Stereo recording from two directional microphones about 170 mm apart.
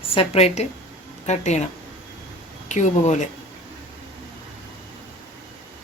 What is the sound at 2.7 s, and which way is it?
Speech, 45° left (ahead or behind).